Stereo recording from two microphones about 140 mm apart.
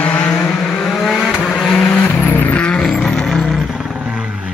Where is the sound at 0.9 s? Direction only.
5° right (ahead or behind).